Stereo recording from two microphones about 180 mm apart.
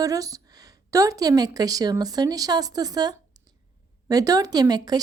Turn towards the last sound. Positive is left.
turn(degrees=-20)  # may be behind; listen again after turning